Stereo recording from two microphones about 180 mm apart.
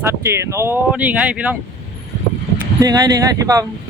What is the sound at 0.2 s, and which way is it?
Speech, 15° right (ahead or behind).